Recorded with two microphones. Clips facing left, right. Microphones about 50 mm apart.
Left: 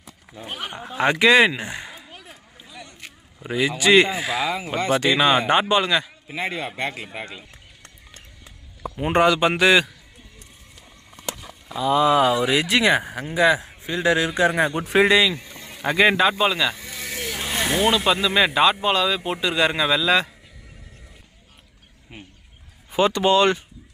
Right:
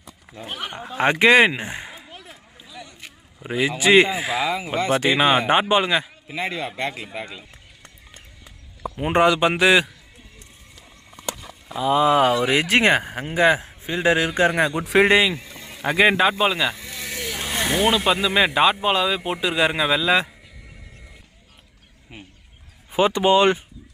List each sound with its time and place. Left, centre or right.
0.4 s speech: centre
0.9 s speech: right
2.2 s a sound: centre
3.4 s speech: centre
4.9 s speech: centre
6.2 s speech: centre
7.8 s a sound: centre
11.2 s a sound: centre
11.8 s speech: right
14.7 s speech: centre
15.0 s speech: right
15.3 s speech: centre
22.9 s speech: centre